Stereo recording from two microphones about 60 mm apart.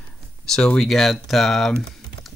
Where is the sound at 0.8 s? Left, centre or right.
Centre.